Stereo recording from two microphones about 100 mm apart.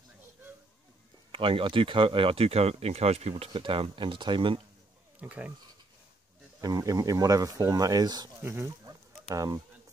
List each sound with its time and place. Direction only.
1.3 s speech: 65° right (ahead or behind); by 3.4 s 90° right
3.5 s speech: 60° right (ahead or behind)
5.2 s speech: 15° right (ahead or behind)
6.6 s speech: 40° right (ahead or behind)
8.4 s chicken: 25° right (ahead or behind)